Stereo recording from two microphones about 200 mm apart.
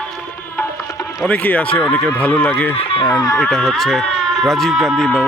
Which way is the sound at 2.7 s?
30° left (ahead or behind).